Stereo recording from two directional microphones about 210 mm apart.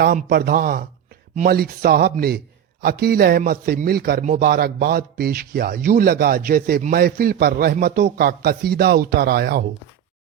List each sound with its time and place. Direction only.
0.0 s a man's voice: 45° right (ahead or behind)